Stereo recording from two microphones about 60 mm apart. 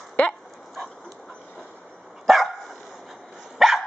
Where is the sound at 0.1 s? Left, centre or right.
Centre.